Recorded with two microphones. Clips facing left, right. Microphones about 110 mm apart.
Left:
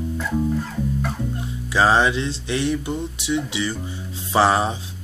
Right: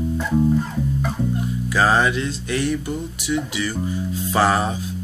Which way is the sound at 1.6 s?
25° left (ahead or behind).